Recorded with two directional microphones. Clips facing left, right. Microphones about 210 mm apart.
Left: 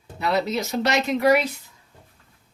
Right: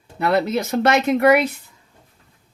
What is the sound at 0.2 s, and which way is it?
Speech, 55° right (ahead or behind).